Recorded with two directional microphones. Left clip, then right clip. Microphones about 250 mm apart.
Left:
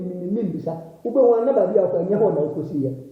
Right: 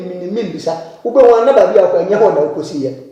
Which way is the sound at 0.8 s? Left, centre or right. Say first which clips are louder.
Right 9 dB; right.